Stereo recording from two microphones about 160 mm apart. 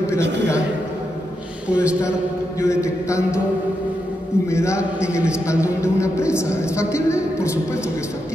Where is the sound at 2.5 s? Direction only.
20° left (ahead or behind).